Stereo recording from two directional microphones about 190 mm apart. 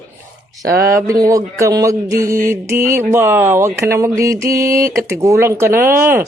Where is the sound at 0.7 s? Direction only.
55° right (ahead or behind).